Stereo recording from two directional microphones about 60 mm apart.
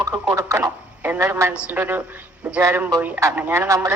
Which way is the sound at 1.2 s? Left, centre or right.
Right.